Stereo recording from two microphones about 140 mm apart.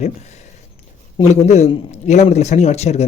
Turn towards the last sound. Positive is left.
turn(degrees=50)  # may be behind; listen again after turning